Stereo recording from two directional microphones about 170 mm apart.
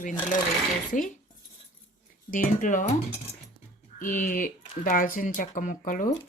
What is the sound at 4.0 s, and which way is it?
Speech, 50° left (ahead or behind).